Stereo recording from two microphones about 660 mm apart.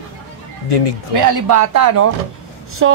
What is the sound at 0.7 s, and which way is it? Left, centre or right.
Speech, left.